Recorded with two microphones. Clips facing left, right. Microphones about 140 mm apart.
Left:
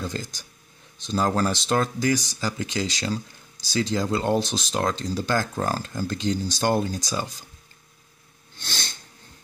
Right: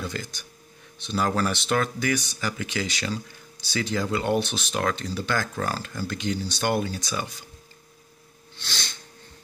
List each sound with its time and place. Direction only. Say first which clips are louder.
0.0 s speech: left 1 dB; 35° left (ahead or behind)
5.3 s speech: left 2 dB; 20° left (ahead or behind)
6.0 s speech: left 2 dB; 35° left (ahead or behind)
8.5 s sneeze: left 1 dB; 45° left (ahead or behind)